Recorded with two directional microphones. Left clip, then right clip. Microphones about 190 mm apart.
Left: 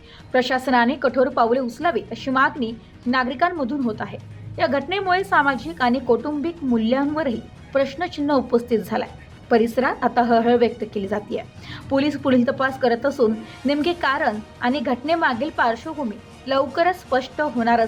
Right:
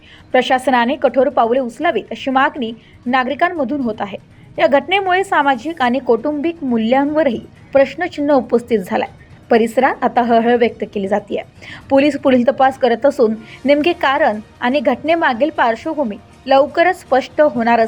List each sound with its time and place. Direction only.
0.3 s a woman's voice: 20° right (ahead or behind)